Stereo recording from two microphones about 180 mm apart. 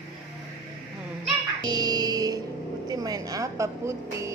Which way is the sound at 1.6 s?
20° right (ahead or behind).